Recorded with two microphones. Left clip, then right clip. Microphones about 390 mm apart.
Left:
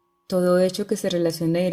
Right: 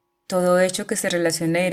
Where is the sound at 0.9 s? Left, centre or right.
Right.